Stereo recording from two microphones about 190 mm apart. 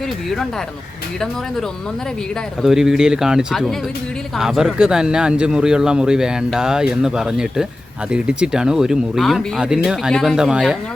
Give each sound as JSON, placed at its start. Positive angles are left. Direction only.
{"t": 2.6, "sound": "speech", "side_deg": 0}